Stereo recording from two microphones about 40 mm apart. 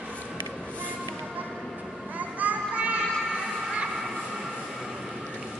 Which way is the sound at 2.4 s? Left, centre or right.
Right.